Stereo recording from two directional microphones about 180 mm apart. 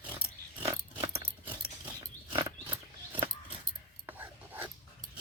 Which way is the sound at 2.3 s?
30° right (ahead or behind).